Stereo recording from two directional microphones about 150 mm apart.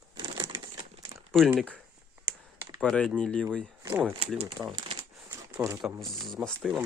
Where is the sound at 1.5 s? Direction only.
5° left (ahead or behind).